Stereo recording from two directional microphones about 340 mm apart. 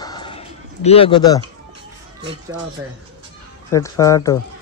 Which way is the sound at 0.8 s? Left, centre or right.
Centre.